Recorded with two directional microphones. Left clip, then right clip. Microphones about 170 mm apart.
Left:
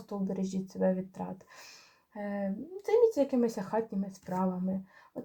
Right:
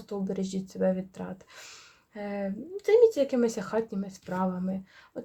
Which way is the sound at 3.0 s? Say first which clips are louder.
Right 4 dB; 35° right (ahead or behind).